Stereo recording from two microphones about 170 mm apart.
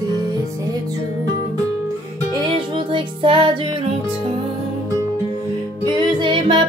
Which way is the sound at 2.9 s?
30° right (ahead or behind).